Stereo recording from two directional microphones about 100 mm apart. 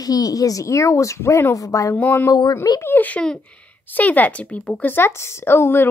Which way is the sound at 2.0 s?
20° left (ahead or behind).